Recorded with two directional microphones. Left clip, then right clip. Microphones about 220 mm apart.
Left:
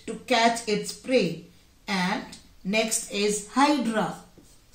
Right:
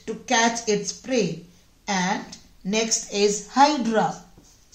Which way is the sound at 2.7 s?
45° right (ahead or behind).